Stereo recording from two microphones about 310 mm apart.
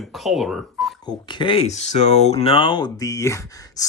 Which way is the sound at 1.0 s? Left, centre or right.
Centre.